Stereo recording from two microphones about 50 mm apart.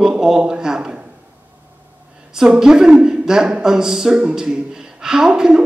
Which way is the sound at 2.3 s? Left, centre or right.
Centre.